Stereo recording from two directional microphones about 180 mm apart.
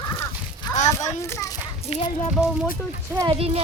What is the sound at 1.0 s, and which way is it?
Children playing, 15° left (ahead or behind).